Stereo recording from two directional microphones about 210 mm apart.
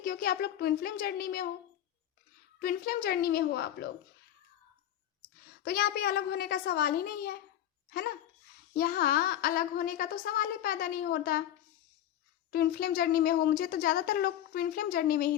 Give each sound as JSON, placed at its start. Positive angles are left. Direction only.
{"t": 0.0, "sound": "a woman's voice", "side_deg": 45}
{"t": 2.6, "sound": "a woman's voice", "side_deg": 45}
{"t": 5.6, "sound": "a woman's voice", "side_deg": 45}
{"t": 12.5, "sound": "a woman's voice", "side_deg": 45}